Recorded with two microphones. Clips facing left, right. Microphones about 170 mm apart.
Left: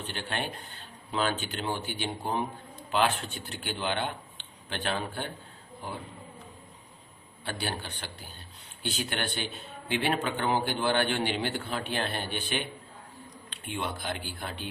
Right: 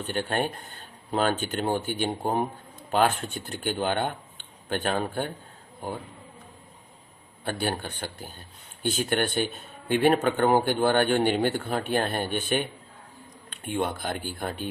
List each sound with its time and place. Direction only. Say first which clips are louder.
0.0 s speech: right 7 dB; 45° right (ahead or behind)
7.4 s speech: right 6 dB; 50° right (ahead or behind)